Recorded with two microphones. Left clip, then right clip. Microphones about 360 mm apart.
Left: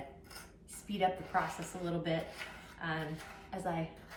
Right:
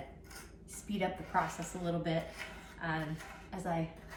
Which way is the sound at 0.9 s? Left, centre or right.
Centre.